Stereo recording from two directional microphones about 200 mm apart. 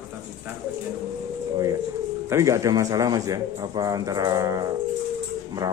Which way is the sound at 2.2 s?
15° right (ahead or behind).